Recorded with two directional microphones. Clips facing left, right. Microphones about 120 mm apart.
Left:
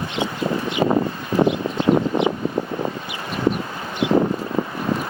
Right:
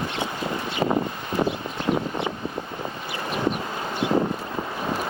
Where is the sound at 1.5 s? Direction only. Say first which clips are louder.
Left 7 dB; 20° left (ahead or behind).